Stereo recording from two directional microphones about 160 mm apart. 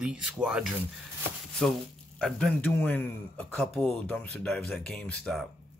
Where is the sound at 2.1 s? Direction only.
5° left (ahead or behind).